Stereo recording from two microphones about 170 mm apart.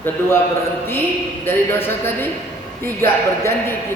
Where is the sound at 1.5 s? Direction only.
10° left (ahead or behind).